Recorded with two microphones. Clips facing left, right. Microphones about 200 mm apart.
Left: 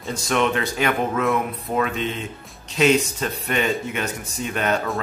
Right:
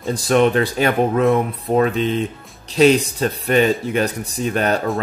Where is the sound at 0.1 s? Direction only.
35° right (ahead or behind).